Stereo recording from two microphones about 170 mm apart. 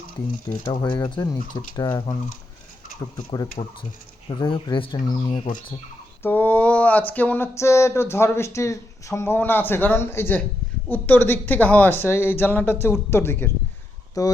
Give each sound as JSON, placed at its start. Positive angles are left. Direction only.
{"t": 0.6, "sound": "speech", "side_deg": 25}
{"t": 3.2, "sound": "speech", "side_deg": 25}
{"t": 6.2, "sound": "a sound", "side_deg": 10}
{"t": 7.1, "sound": "speech", "side_deg": 10}